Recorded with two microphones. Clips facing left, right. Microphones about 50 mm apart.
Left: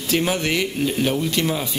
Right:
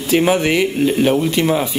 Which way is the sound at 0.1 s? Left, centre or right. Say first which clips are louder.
Right 7 dB; centre.